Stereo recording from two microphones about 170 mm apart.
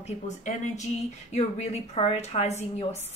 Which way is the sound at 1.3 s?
40° left (ahead or behind).